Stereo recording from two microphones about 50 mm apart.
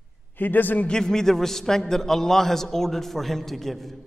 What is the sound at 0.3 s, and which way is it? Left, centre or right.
Speech, left.